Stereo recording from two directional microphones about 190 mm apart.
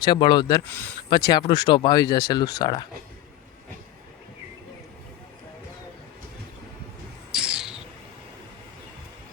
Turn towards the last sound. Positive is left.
turn(degrees=-5)  # may be behind; listen again after turning